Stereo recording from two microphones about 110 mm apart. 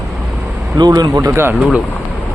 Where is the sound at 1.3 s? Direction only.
20° right (ahead or behind).